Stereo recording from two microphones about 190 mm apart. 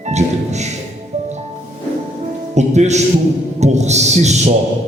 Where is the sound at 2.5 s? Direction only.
35° right (ahead or behind).